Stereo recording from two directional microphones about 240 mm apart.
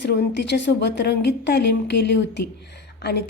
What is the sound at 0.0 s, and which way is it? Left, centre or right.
A woman's voice, left.